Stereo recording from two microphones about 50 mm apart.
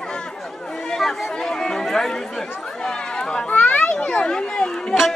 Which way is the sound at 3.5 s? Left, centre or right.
Left.